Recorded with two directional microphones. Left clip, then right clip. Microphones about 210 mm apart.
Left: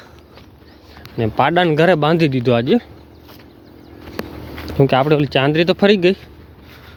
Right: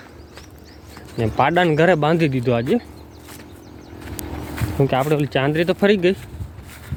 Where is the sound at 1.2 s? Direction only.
30° left (ahead or behind).